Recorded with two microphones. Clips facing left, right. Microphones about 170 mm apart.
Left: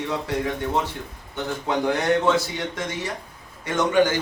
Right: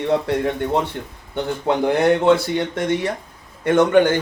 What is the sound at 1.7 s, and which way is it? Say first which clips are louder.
Speech: right 5 dB; 60° right (ahead or behind).